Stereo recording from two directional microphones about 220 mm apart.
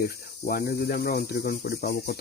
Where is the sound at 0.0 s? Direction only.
40° left (ahead or behind).